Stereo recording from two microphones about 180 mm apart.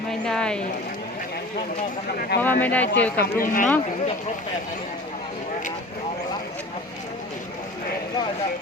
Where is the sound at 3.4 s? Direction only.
50° left (ahead or behind).